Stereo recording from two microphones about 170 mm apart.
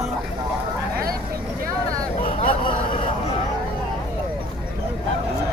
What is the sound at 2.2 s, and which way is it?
Vehicle, 35° left (ahead or behind).